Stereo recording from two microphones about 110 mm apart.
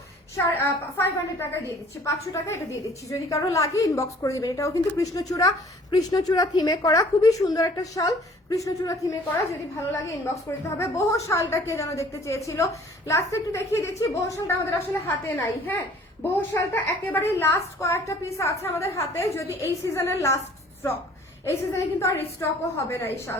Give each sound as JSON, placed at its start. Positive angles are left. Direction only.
{"t": 0.3, "sound": "a woman's voice", "side_deg": 20}
{"t": 10.8, "sound": "a woman's voice", "side_deg": 25}
{"t": 21.4, "sound": "a woman's voice", "side_deg": 25}